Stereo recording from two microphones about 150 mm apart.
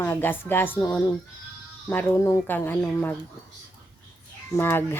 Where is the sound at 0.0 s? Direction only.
15° left (ahead or behind).